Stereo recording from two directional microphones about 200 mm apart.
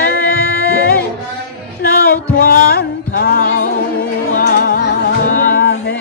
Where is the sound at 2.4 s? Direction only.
50° left (ahead or behind).